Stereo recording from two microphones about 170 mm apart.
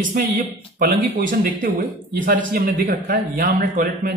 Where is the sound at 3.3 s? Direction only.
50° right (ahead or behind).